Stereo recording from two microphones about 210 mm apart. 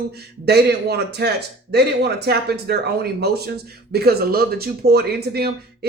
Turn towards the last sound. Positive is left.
turn(degrees=-50)  # may be behind; listen again after turning